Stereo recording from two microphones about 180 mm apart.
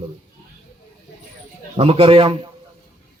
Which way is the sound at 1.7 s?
30° right (ahead or behind).